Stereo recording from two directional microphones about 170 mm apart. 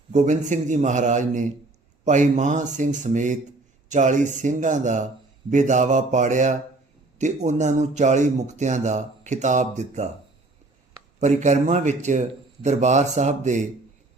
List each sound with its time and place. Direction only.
0.1 s speech: 45° right (ahead or behind)
11.2 s speech: 45° right (ahead or behind)